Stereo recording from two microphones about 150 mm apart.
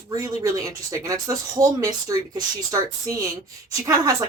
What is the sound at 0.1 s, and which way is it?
Speech, 25° right (ahead or behind).